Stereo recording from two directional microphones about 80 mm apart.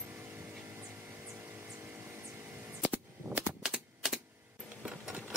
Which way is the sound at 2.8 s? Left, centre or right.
Centre.